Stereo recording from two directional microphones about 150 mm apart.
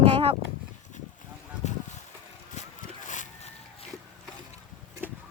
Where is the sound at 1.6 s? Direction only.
50° left (ahead or behind).